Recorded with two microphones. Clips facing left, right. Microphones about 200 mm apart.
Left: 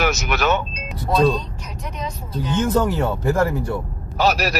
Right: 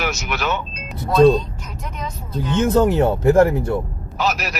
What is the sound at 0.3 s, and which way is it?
Speech, 45° left (ahead or behind).